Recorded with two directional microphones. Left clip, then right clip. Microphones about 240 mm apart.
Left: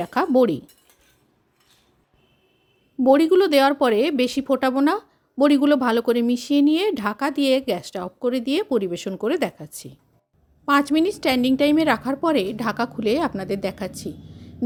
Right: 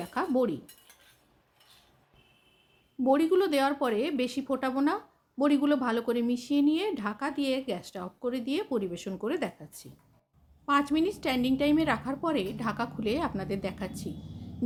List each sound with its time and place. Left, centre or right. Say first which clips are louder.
0.0 s speech: left 10 dB; left
3.0 s speech: left 9 dB; left